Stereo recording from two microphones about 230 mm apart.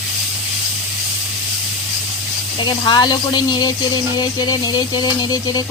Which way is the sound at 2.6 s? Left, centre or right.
Centre.